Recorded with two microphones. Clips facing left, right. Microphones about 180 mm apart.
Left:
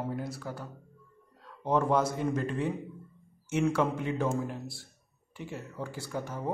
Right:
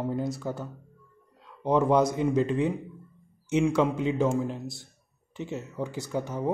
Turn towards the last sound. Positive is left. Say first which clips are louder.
# right 5 dB
turn(degrees=-20)  # may be behind; listen again after turning